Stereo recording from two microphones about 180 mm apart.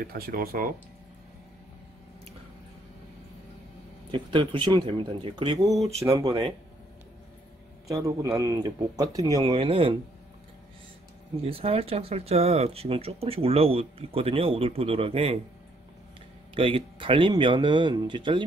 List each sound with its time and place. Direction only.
0.0 s speech: 55° right (ahead or behind)
4.1 s speech: 30° right (ahead or behind)
7.9 s speech: 20° right (ahead or behind)
9.5 s speech: 30° right (ahead or behind)
11.4 s speech: 35° right (ahead or behind)
16.5 s speech: 30° right (ahead or behind)